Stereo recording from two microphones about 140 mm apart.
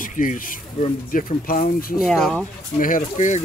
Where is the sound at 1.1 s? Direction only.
85° left.